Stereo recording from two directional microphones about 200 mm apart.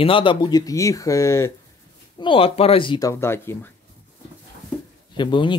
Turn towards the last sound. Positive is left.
turn(degrees=25)  # may be behind; listen again after turning